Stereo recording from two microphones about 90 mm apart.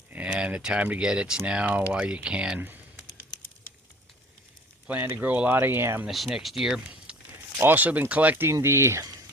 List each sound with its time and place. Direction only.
0.1 s speech: 15° right (ahead or behind)
2.6 s speech: 20° right (ahead or behind)
4.9 s speech: 20° right (ahead or behind)
6.1 s speech: 5° right (ahead or behind)
7.6 s speech: 20° right (ahead or behind)
8.4 s speech: 30° right (ahead or behind)